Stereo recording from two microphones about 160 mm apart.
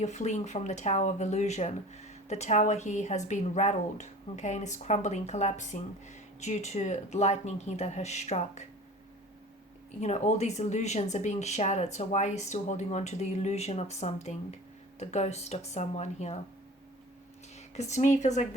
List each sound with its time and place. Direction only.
0.0 s speech: 45° left (ahead or behind)
10.0 s speech: 45° left (ahead or behind)
17.7 s speech: 45° left (ahead or behind)